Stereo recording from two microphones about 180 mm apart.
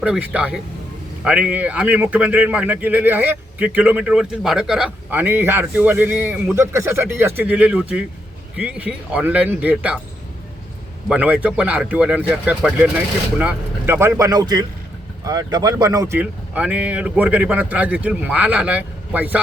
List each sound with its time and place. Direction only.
0.0 s speech: 5° right (ahead or behind)
11.1 s speech: 5° right (ahead or behind)